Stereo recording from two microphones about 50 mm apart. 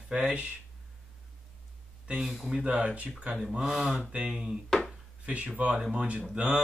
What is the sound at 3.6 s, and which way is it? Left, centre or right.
Speech, centre.